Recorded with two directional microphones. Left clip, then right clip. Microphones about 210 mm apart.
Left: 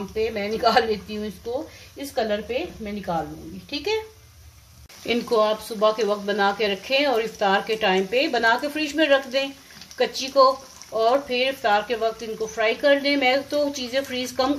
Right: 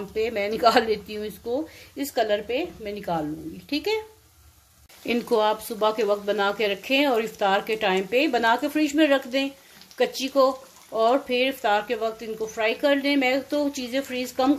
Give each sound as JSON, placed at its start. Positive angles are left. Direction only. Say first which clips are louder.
{"t": 0.1, "sound": "a woman's voice", "louder": "even", "side_deg": -40}
{"t": 5.0, "sound": "speech", "louder": "left 1 dB", "side_deg": -25}